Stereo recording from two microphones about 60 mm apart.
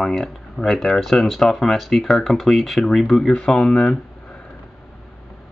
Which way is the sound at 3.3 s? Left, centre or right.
Centre.